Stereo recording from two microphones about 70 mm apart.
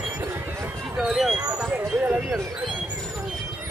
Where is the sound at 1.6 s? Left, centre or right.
Right.